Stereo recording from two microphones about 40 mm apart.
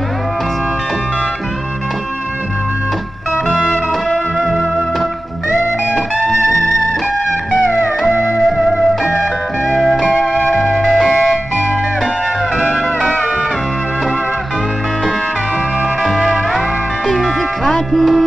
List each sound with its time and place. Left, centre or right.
3.4 s music: right
4.4 s music: centre
8.1 s music: right
8.5 s music: centre
10.1 s music: left
16.0 s music: centre